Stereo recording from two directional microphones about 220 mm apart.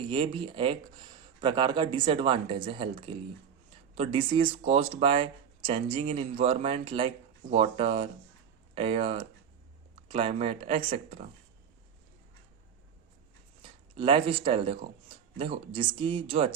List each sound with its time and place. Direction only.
0.0 s speech: 20° right (ahead or behind)
13.6 s speech: 25° right (ahead or behind)